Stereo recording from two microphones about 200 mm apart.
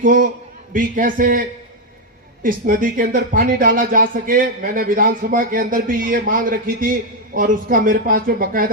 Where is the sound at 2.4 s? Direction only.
45° right (ahead or behind).